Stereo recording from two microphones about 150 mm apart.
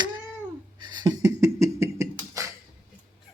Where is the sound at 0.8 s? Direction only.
30° right (ahead or behind).